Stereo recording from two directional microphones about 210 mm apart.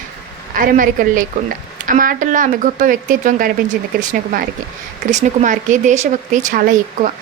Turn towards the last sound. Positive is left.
turn(degrees=-40)  # may be behind; listen again after turning